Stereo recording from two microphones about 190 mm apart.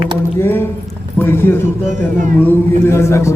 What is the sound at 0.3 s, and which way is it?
A man's voice, 10° left (ahead or behind).